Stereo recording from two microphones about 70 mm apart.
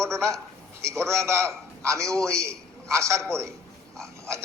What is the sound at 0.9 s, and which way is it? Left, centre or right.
A man's voice, right.